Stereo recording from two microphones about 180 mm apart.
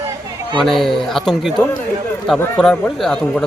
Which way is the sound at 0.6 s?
Centre (ahead or behind).